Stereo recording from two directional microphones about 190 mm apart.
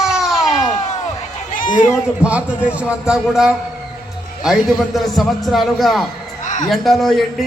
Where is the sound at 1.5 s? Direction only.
45° left (ahead or behind).